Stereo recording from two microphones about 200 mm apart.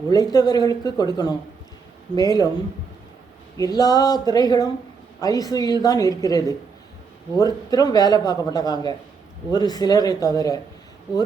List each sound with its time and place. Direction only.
0.1 s a man's voice: 20° left (ahead or behind)
3.6 s a man's voice: 20° left (ahead or behind)